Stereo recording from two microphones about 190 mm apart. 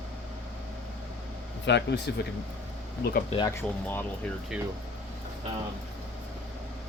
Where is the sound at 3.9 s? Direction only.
10° left (ahead or behind).